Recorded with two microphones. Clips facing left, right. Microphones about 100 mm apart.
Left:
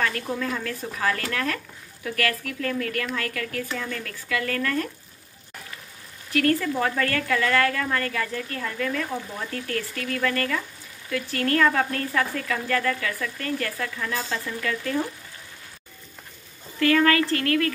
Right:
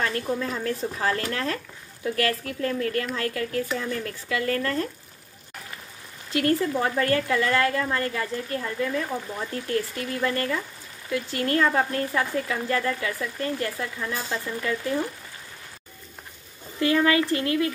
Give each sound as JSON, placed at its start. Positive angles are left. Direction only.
{"t": 0.0, "sound": "a woman's voice", "side_deg": -30}
{"t": 6.3, "sound": "a woman's voice", "side_deg": -25}
{"t": 16.8, "sound": "a woman's voice", "side_deg": -20}